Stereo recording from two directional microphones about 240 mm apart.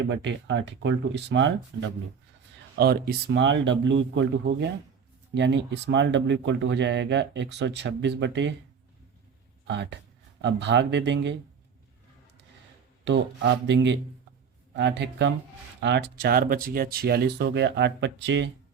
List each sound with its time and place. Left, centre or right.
0.1 s speech: right
2.7 s speech: right
9.6 s speech: right
13.1 s speech: right